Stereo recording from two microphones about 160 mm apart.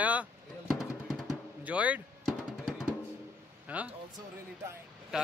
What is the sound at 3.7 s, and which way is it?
Speech, 10° right (ahead or behind).